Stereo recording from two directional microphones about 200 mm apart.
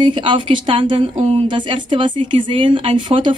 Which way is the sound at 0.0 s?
25° right (ahead or behind).